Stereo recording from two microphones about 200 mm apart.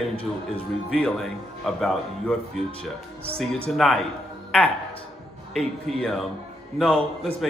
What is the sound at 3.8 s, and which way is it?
Speech, centre (ahead or behind).